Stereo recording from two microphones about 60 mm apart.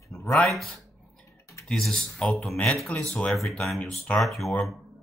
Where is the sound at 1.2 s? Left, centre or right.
Left.